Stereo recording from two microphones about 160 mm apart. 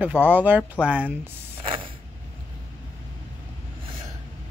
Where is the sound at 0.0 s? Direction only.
10° right (ahead or behind).